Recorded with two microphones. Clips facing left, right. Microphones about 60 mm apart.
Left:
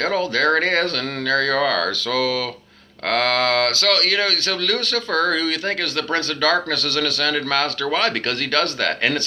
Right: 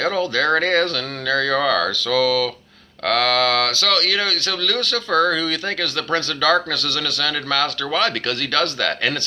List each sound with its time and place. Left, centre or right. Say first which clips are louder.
0.0 s speech: even; left